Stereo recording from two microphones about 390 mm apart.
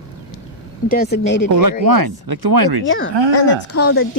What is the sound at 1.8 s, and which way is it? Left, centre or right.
Speech, right.